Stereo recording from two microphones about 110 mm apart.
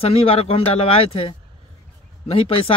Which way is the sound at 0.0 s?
60° left (ahead or behind).